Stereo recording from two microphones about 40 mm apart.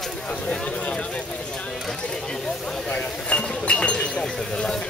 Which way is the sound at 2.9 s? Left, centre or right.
Left.